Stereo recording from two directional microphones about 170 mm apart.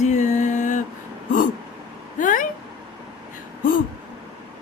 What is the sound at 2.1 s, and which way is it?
Speech, 50° left (ahead or behind).